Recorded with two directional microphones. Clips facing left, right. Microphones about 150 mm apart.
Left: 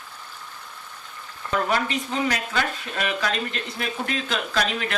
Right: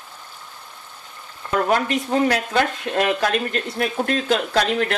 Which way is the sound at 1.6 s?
55° right (ahead or behind).